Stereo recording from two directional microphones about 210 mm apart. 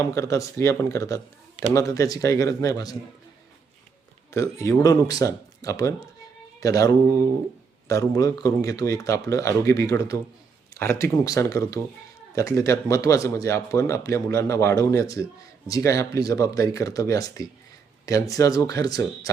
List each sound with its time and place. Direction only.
0.0 s speech: 15° left (ahead or behind)
4.3 s speech: 15° left (ahead or behind)